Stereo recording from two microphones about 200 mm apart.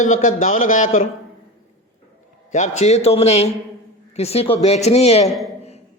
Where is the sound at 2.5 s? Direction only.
35° left (ahead or behind).